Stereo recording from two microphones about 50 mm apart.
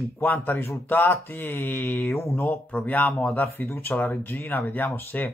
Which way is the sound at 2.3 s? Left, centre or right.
Left.